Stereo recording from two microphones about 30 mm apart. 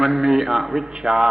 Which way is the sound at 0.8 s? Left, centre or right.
Right.